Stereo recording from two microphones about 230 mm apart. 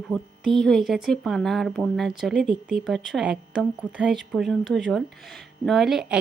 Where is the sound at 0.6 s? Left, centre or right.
Centre.